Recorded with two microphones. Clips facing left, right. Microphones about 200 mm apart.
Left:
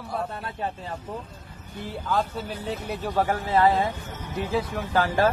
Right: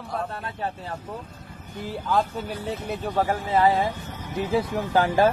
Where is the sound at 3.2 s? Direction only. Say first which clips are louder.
Even; 10° right (ahead or behind).